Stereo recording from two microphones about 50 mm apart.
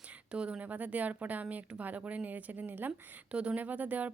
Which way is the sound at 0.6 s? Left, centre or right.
Right.